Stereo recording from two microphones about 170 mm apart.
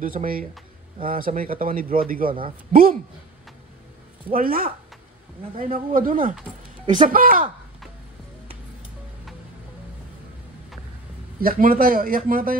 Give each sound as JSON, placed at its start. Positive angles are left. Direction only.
{"t": 0.0, "sound": "speech", "side_deg": -55}
{"t": 4.3, "sound": "speech", "side_deg": -60}
{"t": 11.4, "sound": "speech", "side_deg": -60}